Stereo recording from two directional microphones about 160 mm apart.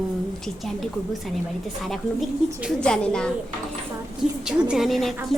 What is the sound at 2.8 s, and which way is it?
A woman's voice, 5° left (ahead or behind).